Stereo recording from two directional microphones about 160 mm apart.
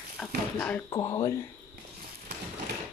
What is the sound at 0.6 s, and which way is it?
Speech, 10° left (ahead or behind).